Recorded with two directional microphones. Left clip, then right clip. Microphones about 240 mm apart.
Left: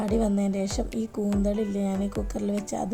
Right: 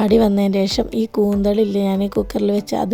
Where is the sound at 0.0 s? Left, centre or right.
Right.